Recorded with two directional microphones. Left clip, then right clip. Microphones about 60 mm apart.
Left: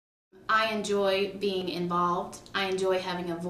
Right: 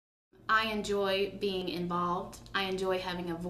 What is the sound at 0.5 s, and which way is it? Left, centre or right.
A woman's voice, left.